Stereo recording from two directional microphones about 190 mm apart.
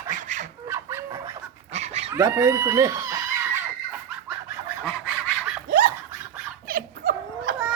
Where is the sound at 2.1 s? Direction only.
15° right (ahead or behind).